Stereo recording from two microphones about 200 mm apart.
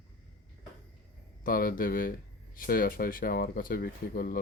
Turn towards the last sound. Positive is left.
turn(degrees=45)  # may be behind; listen again after turning